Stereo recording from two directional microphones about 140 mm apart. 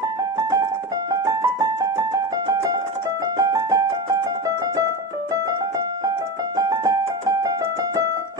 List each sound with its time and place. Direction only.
0.2 s music: 25° right (ahead or behind)
6.0 s keyboard: 25° right (ahead or behind)